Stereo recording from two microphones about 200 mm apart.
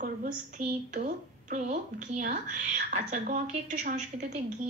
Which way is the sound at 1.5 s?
40° right (ahead or behind).